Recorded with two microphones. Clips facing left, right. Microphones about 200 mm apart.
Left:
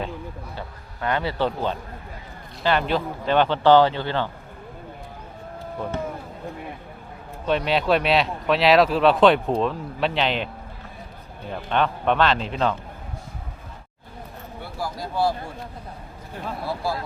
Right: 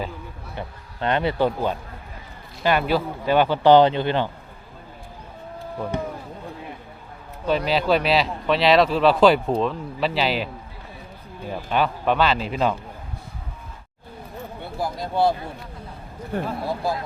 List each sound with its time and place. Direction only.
0.5 s a man's voice: 25° right (ahead or behind)
5.9 s a sound: 15° right (ahead or behind)
7.4 s speech: centre (ahead or behind)
11.5 s speech: 5° right (ahead or behind)
14.6 s a sound: 20° right (ahead or behind)
16.3 s speech: 60° right (ahead or behind)
16.6 s a man's voice: 15° right (ahead or behind)